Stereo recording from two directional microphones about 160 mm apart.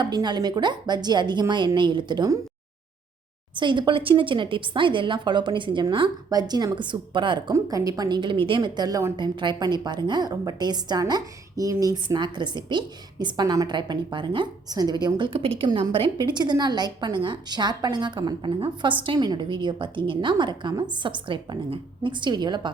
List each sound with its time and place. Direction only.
0.0 s speech: 25° right (ahead or behind)
3.5 s speech: 30° right (ahead or behind)